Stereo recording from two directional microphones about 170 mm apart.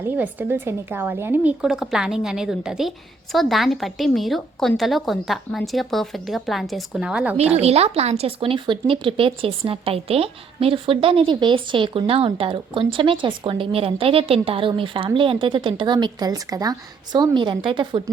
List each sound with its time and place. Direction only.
0.0 s a woman's voice: 10° right (ahead or behind)
7.3 s speech: 40° right (ahead or behind)